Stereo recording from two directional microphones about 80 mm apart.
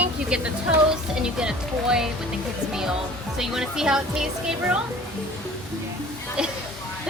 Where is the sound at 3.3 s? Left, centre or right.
Centre.